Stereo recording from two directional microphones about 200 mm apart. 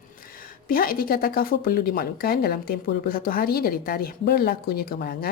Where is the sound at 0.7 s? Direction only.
45° left (ahead or behind).